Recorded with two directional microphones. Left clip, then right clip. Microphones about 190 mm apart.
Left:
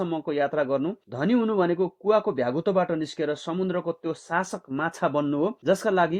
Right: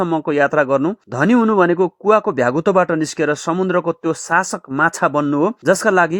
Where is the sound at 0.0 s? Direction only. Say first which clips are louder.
Right 10 dB; 35° right (ahead or behind).